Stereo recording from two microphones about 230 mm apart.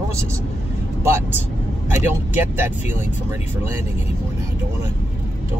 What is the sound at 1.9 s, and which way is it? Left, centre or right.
Speech, centre.